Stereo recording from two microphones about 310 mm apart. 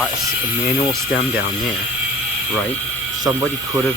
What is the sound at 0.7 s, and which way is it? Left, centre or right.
Speech, left.